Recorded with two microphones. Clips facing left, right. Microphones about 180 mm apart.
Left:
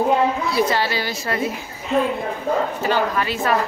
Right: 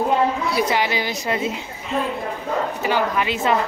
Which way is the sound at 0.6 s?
15° right (ahead or behind).